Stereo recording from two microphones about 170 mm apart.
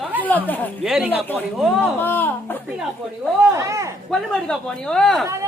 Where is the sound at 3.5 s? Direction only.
20° right (ahead or behind).